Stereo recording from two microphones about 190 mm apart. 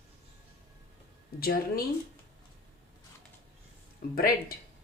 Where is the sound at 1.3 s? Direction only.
50° left (ahead or behind).